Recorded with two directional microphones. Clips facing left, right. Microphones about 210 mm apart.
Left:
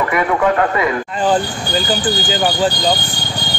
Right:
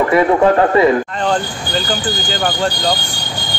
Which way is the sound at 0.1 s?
30° right (ahead or behind).